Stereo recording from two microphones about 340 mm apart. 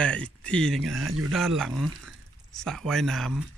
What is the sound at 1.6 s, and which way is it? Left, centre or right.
Speech, centre.